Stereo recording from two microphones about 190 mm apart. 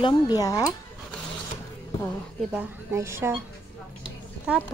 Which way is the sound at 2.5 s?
15° right (ahead or behind).